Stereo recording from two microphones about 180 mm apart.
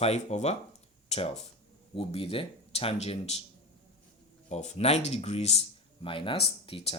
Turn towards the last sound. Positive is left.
turn(degrees=30)  # may be behind; listen again after turning